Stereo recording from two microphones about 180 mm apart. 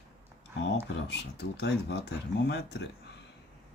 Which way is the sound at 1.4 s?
70° left (ahead or behind).